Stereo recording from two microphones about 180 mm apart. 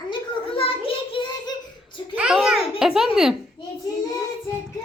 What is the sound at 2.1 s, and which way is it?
A child's voice, 5° right (ahead or behind).